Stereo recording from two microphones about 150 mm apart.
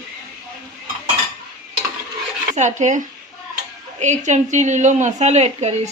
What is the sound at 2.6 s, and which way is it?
Speech, 55° right (ahead or behind).